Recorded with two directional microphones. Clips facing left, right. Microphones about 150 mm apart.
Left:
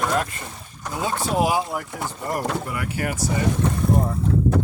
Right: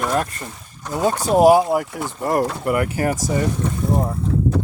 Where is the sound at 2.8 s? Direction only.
40° right (ahead or behind).